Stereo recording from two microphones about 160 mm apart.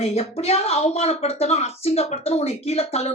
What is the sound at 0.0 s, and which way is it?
Speech, 40° left (ahead or behind).